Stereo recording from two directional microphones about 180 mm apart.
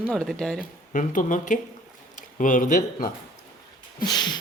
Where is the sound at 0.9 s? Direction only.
50° left (ahead or behind).